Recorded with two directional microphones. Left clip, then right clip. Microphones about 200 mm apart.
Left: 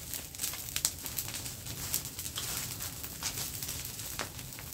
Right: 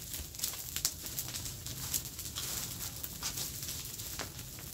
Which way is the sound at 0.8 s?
15° left (ahead or behind).